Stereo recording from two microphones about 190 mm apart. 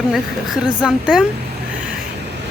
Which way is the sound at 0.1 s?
Centre (ahead or behind).